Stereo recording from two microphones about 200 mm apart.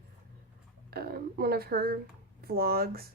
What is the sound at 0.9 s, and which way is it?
A woman's voice, 50° right (ahead or behind).